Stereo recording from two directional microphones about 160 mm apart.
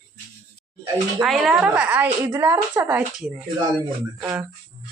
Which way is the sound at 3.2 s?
5° right (ahead or behind).